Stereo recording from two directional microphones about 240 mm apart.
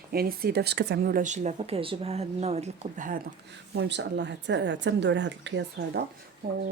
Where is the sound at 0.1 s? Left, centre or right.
Right.